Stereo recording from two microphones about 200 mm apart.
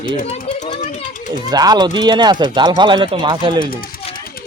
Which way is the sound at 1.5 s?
20° right (ahead or behind).